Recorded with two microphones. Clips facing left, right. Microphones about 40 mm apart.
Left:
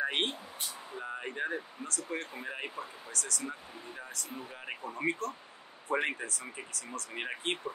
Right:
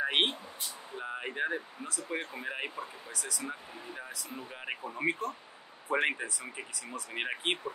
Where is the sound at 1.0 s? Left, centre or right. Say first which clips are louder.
Right 2 dB; centre.